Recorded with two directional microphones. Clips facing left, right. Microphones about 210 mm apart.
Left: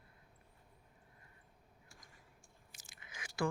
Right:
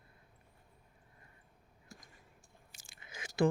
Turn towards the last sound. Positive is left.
turn(degrees=-25)  # may be behind; listen again after turning